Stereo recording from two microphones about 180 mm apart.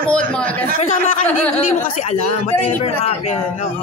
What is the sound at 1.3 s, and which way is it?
Speech, 10° left (ahead or behind).